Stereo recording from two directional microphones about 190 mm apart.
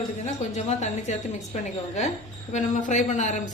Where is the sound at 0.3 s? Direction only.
35° left (ahead or behind).